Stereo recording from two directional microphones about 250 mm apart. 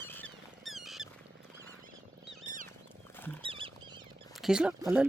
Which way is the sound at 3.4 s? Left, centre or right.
Right.